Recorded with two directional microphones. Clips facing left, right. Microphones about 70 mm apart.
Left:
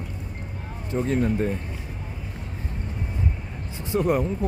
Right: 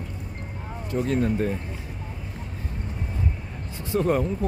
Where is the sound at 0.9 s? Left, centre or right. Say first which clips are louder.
Even; left.